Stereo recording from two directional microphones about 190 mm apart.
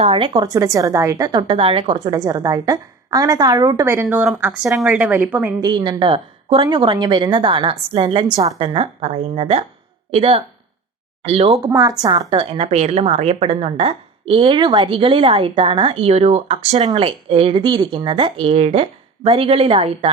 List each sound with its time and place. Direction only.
0.0 s a woman's voice: 25° right (ahead or behind)
4.0 s a woman's voice: 5° right (ahead or behind)
5.6 s a woman's voice: 25° right (ahead or behind)
11.6 s a woman's voice: 20° right (ahead or behind)